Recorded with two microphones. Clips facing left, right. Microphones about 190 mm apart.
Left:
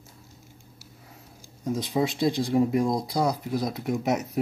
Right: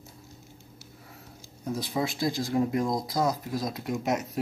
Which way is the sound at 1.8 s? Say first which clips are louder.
Left 4 dB; 20° left (ahead or behind).